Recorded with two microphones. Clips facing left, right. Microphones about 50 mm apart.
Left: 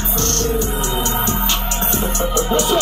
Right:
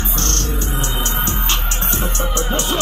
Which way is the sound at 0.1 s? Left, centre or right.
Right.